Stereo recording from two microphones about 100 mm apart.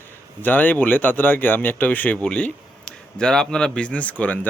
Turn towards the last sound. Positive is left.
turn(degrees=15)  # may be behind; listen again after turning